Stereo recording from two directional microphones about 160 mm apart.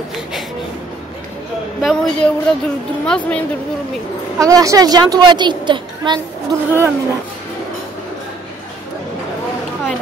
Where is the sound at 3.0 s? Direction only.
10° left (ahead or behind).